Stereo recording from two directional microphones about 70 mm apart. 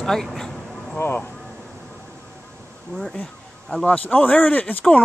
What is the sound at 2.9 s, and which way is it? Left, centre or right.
Speech, right.